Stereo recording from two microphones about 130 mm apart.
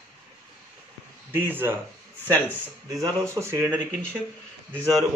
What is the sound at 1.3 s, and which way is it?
Speech, 15° right (ahead or behind).